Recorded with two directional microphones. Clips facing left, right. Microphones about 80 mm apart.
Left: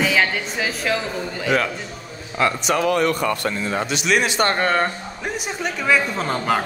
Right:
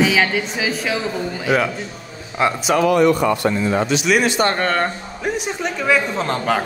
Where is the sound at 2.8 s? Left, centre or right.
Right.